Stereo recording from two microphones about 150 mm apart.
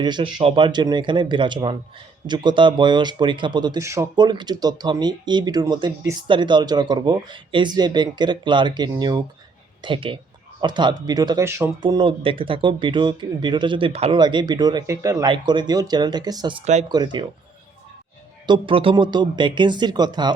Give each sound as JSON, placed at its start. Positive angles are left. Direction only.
{"t": 0.0, "sound": "speech", "side_deg": -30}
{"t": 4.1, "sound": "speech", "side_deg": -30}
{"t": 11.8, "sound": "speech", "side_deg": -35}
{"t": 18.4, "sound": "speech", "side_deg": -30}